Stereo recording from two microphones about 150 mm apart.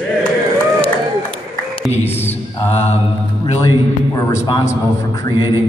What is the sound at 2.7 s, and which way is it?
Mantra, 45° left (ahead or behind).